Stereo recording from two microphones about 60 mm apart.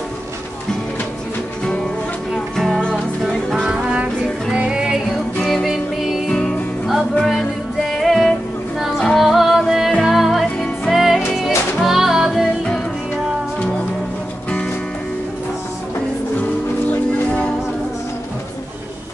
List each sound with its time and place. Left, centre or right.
2.3 s music: centre
3.5 s music: centre
5.4 s music: centre
6.2 s music: centre
8.0 s music: centre